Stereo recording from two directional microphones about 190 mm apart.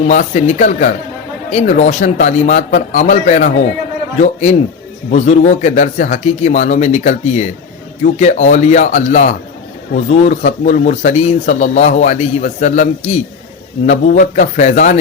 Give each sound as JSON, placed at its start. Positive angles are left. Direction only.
{"t": 0.0, "sound": "speech", "side_deg": 40}